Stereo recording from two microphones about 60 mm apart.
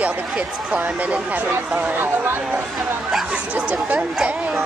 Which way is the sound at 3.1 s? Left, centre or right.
Centre.